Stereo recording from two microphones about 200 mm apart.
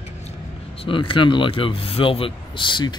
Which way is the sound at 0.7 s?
25° left (ahead or behind).